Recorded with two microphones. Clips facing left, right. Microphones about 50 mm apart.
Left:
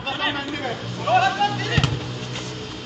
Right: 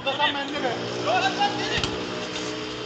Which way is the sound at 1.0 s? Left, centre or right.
Centre.